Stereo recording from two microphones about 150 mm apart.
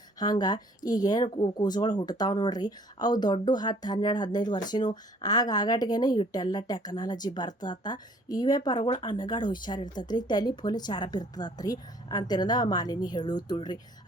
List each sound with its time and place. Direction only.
0.2 s speech: 25° left (ahead or behind)